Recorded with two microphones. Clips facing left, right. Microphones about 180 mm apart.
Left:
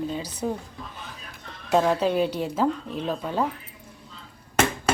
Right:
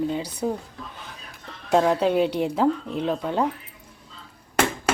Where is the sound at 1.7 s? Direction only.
10° right (ahead or behind).